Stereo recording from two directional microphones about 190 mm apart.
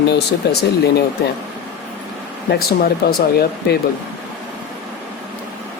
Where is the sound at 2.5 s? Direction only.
55° left (ahead or behind).